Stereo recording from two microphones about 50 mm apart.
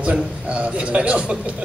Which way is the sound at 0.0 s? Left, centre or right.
Right.